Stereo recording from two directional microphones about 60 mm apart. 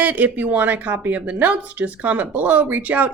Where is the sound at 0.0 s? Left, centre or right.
Right.